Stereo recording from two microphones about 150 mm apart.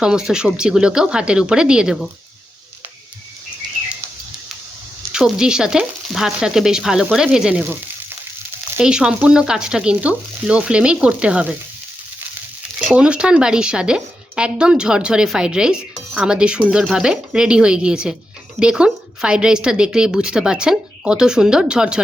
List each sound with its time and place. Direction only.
0.0 s a woman's voice: 5° right (ahead or behind)
5.1 s a woman's voice: 5° right (ahead or behind)
8.8 s frying: 5° right (ahead or behind)
12.9 s a woman's voice: 5° right (ahead or behind)